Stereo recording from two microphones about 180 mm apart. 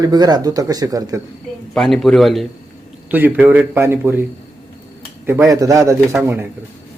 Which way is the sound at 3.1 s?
10° right (ahead or behind).